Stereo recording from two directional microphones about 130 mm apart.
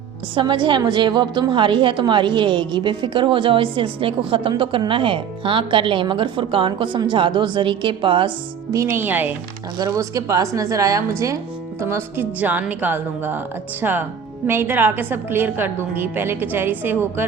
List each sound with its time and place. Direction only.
0.3 s a woman's voice: 35° right (ahead or behind)
8.7 s a woman's voice: 20° right (ahead or behind)
9.7 s a woman's voice: 30° right (ahead or behind)